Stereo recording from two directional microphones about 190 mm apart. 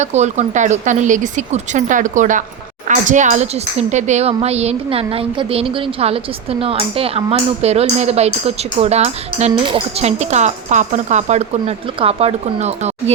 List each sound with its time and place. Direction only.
0.0 s a woman's voice: 35° right (ahead or behind)